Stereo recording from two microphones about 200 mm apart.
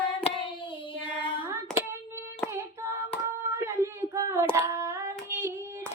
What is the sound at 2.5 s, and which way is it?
Hands, 15° right (ahead or behind).